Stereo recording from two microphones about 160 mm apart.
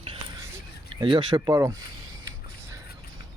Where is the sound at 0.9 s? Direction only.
30° right (ahead or behind).